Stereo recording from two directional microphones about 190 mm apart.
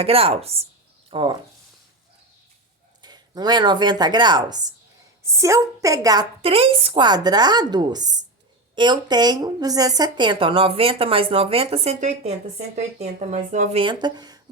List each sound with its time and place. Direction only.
0.0 s a woman's voice: 30° right (ahead or behind)
3.0 s a woman's voice: 20° right (ahead or behind)
6.4 s speech: 30° right (ahead or behind)
13.8 s speech: 20° right (ahead or behind)